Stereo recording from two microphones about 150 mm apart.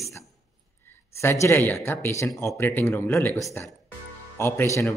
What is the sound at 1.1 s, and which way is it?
Speech, 20° left (ahead or behind).